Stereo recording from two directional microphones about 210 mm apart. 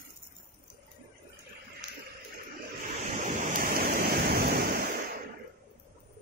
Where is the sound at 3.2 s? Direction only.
40° right (ahead or behind).